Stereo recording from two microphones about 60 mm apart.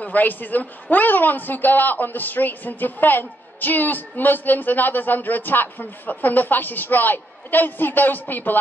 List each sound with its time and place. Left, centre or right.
0.0 s a woman's voice: left